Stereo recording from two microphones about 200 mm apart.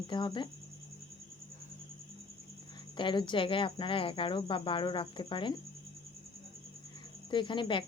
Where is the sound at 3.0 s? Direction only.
25° left (ahead or behind).